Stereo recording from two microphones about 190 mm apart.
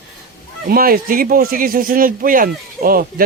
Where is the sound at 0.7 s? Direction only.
50° right (ahead or behind).